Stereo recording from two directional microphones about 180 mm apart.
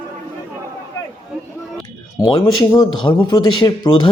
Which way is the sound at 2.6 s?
20° left (ahead or behind).